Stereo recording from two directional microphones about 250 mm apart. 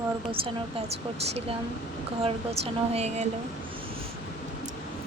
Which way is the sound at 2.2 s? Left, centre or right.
Right.